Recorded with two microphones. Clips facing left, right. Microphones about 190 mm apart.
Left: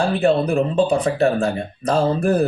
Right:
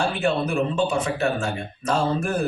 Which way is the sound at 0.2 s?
35° left (ahead or behind).